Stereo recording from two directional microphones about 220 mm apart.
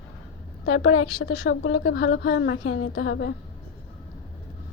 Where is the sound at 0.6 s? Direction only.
70° left (ahead or behind).